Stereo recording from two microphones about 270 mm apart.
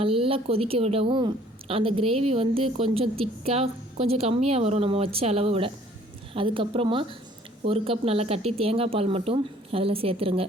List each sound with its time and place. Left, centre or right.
0.0 s a woman's voice: centre